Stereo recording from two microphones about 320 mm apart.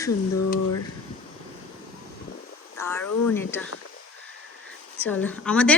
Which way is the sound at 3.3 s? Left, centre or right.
Centre.